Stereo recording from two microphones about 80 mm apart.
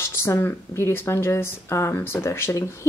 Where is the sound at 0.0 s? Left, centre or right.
Left.